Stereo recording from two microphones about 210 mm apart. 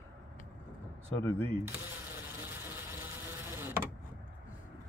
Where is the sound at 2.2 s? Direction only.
10° right (ahead or behind).